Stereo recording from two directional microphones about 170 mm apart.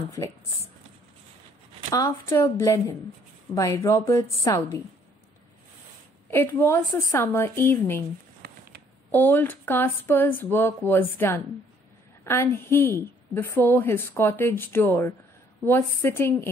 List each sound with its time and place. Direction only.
0.2 s a woman's voice: 15° left (ahead or behind)
1.9 s a woman's voice: 20° left (ahead or behind)
6.3 s a woman's voice: 15° left (ahead or behind)
9.1 s a woman's voice: 10° left (ahead or behind)